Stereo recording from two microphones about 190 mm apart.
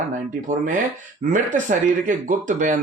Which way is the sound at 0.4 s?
40° right (ahead or behind).